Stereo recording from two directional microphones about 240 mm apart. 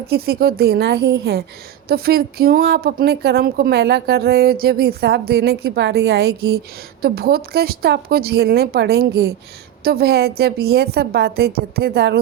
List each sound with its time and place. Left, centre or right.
0.1 s a woman's voice: right